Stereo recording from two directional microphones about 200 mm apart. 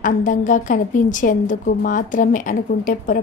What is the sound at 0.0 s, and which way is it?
A woman's voice, 40° left (ahead or behind).